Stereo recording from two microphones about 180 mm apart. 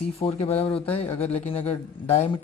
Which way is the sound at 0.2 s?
30° left (ahead or behind).